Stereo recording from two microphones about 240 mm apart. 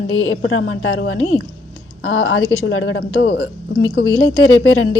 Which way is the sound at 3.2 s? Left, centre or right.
Left.